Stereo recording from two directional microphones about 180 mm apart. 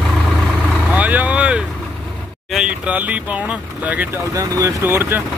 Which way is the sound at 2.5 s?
5° right (ahead or behind).